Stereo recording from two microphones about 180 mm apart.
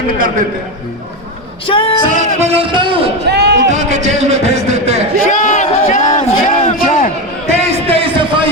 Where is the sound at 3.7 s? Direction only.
40° right (ahead or behind).